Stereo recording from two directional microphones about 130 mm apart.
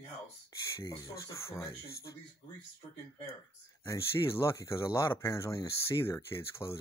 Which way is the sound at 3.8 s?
20° left (ahead or behind).